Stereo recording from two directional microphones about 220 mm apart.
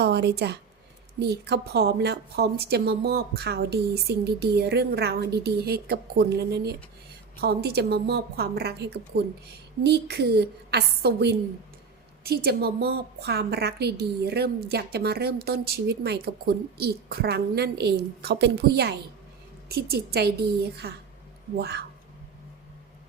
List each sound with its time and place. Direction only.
0.0 s a woman's voice: 50° right (ahead or behind)